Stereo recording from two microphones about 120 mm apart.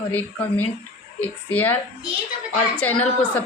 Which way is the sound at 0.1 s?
15° left (ahead or behind).